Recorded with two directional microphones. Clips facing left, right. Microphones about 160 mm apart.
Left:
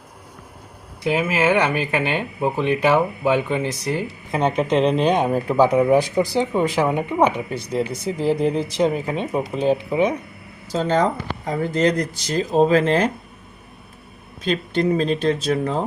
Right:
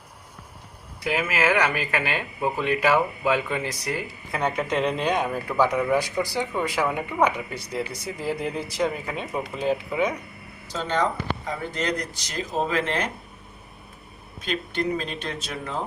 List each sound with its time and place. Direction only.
1.0 s speech: 25° left (ahead or behind)
10.7 s speech: 35° left (ahead or behind)
14.4 s speech: 35° left (ahead or behind)